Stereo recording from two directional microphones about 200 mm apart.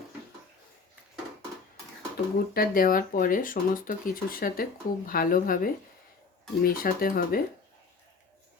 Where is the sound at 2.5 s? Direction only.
45° left (ahead or behind).